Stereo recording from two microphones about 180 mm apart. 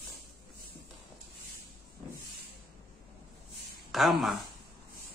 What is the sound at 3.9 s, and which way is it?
Speech, centre (ahead or behind).